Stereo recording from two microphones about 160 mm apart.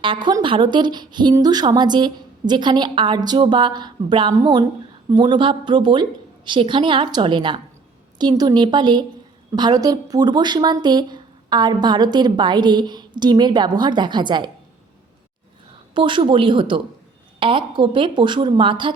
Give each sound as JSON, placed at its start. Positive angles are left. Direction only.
{"t": 0.0, "sound": "a woman's voice", "side_deg": -30}
{"t": 16.0, "sound": "a woman's voice", "side_deg": -30}